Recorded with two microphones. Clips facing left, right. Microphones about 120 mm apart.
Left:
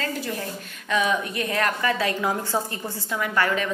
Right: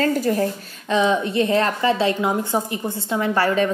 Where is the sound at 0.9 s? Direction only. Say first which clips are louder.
Right 5 dB; 30° right (ahead or behind).